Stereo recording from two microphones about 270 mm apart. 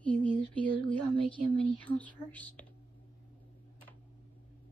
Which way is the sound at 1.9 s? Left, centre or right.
Centre.